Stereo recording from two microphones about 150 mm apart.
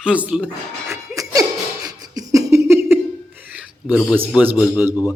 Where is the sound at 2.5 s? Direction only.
15° right (ahead or behind).